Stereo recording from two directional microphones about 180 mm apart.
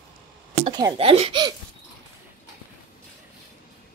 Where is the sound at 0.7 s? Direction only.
20° right (ahead or behind).